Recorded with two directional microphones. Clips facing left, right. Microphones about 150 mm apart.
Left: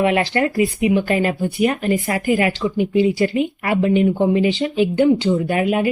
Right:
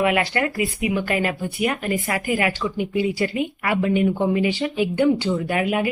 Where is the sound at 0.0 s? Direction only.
30° left (ahead or behind).